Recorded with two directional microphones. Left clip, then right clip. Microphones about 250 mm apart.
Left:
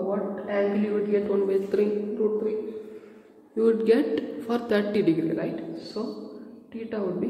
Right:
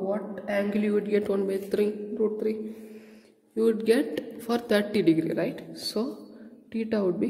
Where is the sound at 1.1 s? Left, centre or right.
Right.